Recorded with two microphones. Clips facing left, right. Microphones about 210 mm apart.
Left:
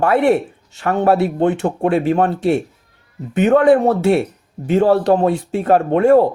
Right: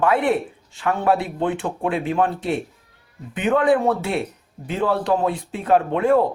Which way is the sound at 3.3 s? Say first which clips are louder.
Left 6 dB; 45° left (ahead or behind).